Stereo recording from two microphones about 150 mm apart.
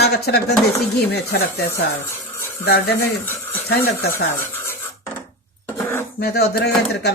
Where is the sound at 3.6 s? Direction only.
90° left.